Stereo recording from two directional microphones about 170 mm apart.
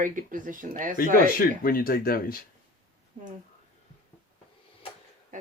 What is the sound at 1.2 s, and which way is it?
Speech, 60° left (ahead or behind).